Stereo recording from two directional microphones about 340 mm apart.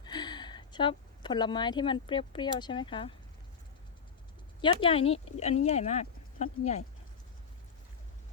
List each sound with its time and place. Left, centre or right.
0.0 s a sound: centre
2.6 s speech: centre
4.6 s speech: centre